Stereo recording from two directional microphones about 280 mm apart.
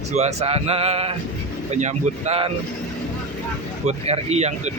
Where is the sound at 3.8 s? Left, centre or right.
Right.